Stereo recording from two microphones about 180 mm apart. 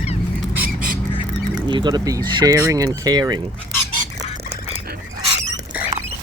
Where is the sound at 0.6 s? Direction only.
50° right (ahead or behind).